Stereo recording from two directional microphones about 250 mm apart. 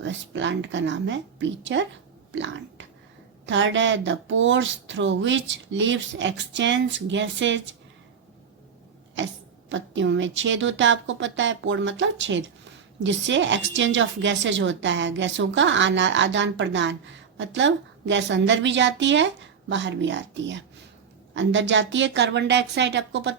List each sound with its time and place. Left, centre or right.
0.0 s a woman's voice: right
9.6 s a woman's voice: right